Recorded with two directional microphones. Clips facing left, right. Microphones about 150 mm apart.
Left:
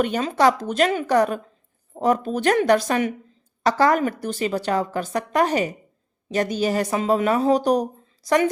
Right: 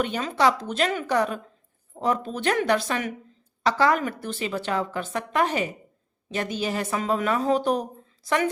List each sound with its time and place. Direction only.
0.0 s a woman's voice: 45° left (ahead or behind)